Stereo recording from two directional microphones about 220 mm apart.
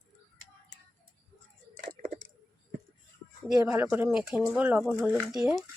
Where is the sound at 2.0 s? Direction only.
40° right (ahead or behind).